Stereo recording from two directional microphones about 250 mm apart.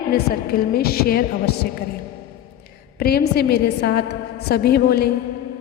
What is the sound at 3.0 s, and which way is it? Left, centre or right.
A woman's voice, left.